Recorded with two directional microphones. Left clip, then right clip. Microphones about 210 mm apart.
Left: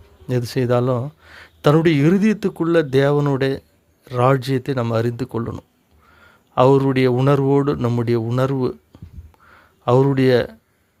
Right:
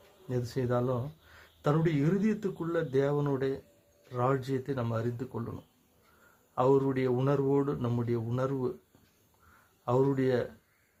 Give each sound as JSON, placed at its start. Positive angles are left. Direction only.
{"t": 0.3, "sound": "speech", "side_deg": 45}
{"t": 9.8, "sound": "speech", "side_deg": 45}